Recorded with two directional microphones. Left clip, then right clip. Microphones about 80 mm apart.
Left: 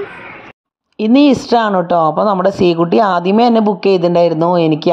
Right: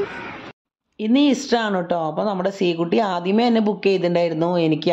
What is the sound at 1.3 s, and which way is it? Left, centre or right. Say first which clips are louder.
Speech: left 8 dB; left.